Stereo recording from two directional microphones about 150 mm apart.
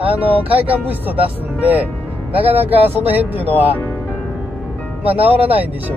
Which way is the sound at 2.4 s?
40° right (ahead or behind).